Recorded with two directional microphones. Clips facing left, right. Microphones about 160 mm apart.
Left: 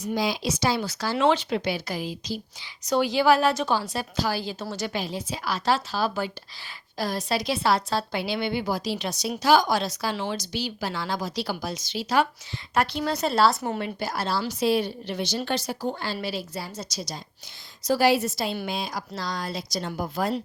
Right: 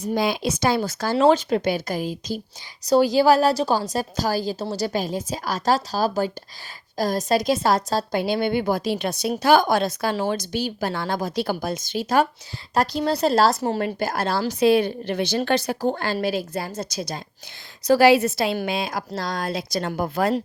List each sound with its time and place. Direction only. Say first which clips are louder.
0.0 s a woman's voice: right 4 dB; 55° right (ahead or behind)
12.7 s a woman's voice: right 4 dB; 40° right (ahead or behind)
13.8 s a woman's voice: right 5 dB; 50° right (ahead or behind)
17.8 s a woman's voice: right 6 dB; 70° right (ahead or behind)
18.6 s speech: right 5 dB; 60° right (ahead or behind)